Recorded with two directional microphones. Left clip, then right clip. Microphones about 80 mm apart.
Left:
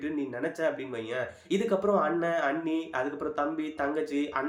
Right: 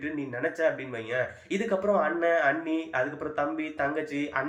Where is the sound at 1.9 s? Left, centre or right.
Left.